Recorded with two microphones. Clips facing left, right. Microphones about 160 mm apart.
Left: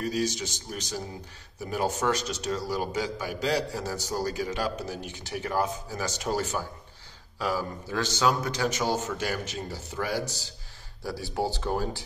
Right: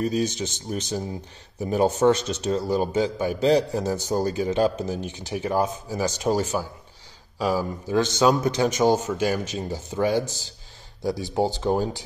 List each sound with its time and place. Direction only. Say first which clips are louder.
0.0 s a man's voice: right 4 dB; 25° right (ahead or behind)